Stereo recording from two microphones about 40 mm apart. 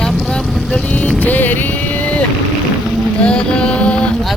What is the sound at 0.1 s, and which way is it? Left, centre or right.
Vehicle, centre.